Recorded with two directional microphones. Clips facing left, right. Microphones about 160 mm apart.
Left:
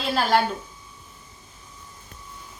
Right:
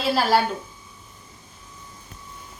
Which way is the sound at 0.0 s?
5° right (ahead or behind).